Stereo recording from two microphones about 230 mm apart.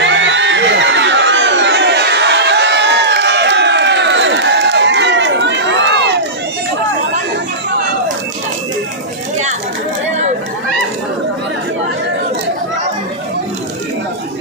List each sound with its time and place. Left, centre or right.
0.0 s crowd: right